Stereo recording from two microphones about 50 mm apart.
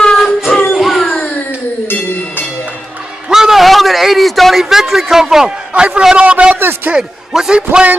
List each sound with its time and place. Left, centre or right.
0.0 s music: centre
3.3 s a sound: centre
5.7 s a man's voice: right
6.5 s a man's voice: right
6.9 s a man's voice: centre